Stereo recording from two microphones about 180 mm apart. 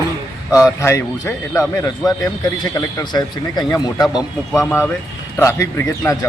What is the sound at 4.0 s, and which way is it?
Speech, centre (ahead or behind).